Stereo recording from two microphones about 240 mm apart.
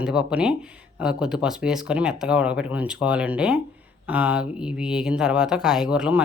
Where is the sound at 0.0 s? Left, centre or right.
Centre.